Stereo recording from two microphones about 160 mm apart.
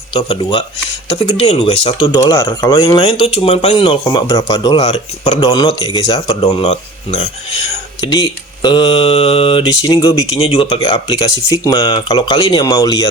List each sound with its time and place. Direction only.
1.5 s speech: 40° left (ahead or behind)
1.9 s speech: 30° left (ahead or behind)
2.4 s speech: 15° left (ahead or behind)
3.2 s speech: 35° left (ahead or behind)
4.0 s speech: 20° left (ahead or behind)
4.8 s speech: 45° left (ahead or behind)
5.4 s speech: 25° left (ahead or behind)
6.4 s speech: 40° left (ahead or behind)
8.0 s speech: 25° left (ahead or behind)
10.4 s speech: 35° left (ahead or behind)
11.8 s speech: 30° left (ahead or behind)